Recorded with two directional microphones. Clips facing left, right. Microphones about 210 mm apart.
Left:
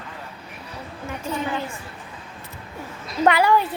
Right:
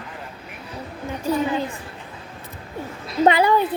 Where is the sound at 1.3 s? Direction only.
35° right (ahead or behind).